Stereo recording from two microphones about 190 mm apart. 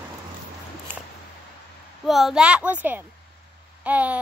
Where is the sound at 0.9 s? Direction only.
10° right (ahead or behind).